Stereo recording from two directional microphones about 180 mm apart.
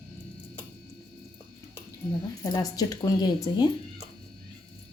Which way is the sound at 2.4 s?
20° left (ahead or behind).